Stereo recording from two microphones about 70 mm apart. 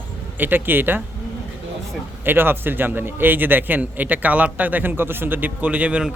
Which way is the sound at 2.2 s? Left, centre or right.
Right.